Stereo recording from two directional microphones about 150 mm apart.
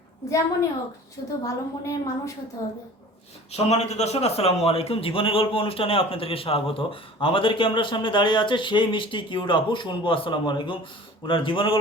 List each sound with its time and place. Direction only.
0.3 s a woman's voice: 20° left (ahead or behind)
1.2 s a man's voice: 40° left (ahead or behind)
1.8 s a woman's voice: 20° left (ahead or behind)
3.5 s a man's voice: 45° left (ahead or behind)